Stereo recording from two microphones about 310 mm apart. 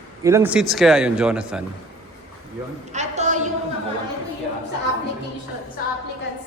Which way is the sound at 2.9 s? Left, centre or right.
Right.